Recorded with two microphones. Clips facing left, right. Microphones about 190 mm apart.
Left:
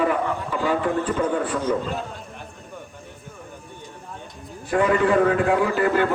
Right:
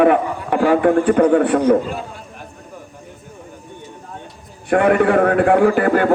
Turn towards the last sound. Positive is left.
turn(degrees=-55)  # may be behind; listen again after turning